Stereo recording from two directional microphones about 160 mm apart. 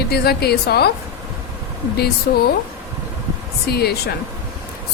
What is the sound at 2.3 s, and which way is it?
Speech, 75° left (ahead or behind).